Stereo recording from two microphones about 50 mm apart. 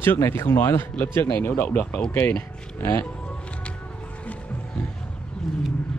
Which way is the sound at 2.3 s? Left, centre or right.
Left.